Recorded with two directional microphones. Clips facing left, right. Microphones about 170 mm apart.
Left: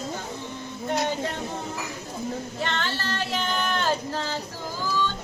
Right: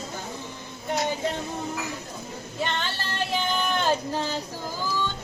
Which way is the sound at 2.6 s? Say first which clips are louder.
Right 1 dB; 15° right (ahead or behind).